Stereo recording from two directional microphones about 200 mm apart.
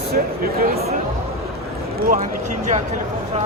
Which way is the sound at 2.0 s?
45° right (ahead or behind).